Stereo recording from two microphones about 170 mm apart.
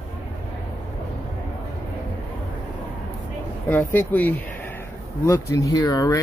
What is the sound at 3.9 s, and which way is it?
Speech, 10° left (ahead or behind).